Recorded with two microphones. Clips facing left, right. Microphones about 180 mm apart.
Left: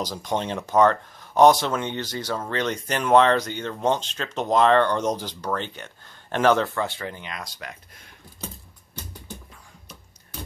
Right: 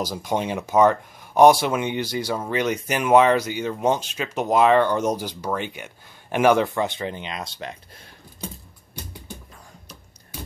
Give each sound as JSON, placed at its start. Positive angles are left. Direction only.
{"t": 0.0, "sound": "speech", "side_deg": -10}